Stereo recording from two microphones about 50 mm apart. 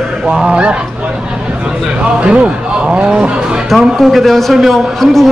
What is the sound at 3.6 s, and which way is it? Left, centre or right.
A man's voice, centre.